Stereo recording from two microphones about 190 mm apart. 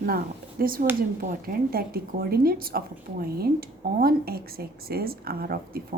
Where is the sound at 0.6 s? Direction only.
50° right (ahead or behind).